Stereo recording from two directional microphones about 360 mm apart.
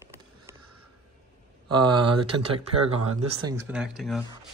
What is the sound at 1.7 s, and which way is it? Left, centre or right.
Speech, centre.